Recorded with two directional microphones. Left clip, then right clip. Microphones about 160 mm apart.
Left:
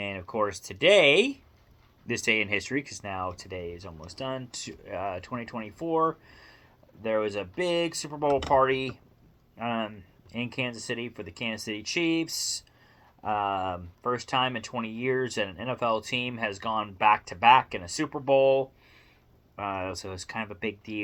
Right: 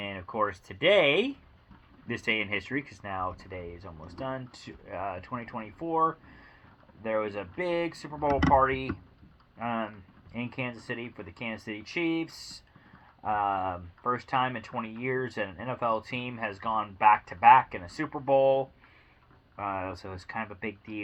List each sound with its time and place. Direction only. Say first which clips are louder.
0.0 s speech: left 1 dB; 25° left (ahead or behind)
13.2 s speech: even; 35° left (ahead or behind)